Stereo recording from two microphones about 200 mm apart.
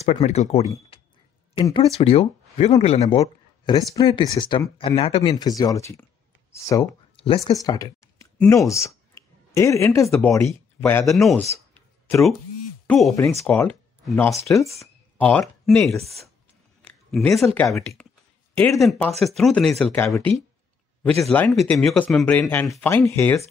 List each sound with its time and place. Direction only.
0.0 s speech: 30° left (ahead or behind)
0.9 s a sound: 30° left (ahead or behind)
1.6 s speech: 25° left (ahead or behind)
3.2 s a sound: 20° left (ahead or behind)
3.9 s speech: 20° left (ahead or behind)
7.2 s speech: 25° left (ahead or behind)
10.0 s speech: centre (ahead or behind)
10.8 s speech: 10° left (ahead or behind)
11.1 s speech: centre (ahead or behind)
11.7 s a sound: 5° left (ahead or behind)
12.8 s speech: centre (ahead or behind)
16.8 s a sound: 10° left (ahead or behind)
17.6 s speech: 5° left (ahead or behind)